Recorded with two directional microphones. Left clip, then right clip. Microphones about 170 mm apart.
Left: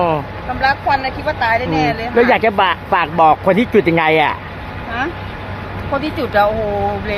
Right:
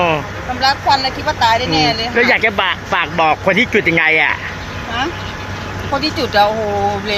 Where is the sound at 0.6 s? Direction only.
5° left (ahead or behind).